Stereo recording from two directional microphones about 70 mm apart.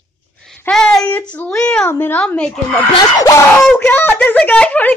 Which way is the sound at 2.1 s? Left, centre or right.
Centre.